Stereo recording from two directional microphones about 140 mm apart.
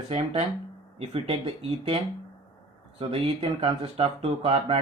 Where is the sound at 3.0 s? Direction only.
45° right (ahead or behind).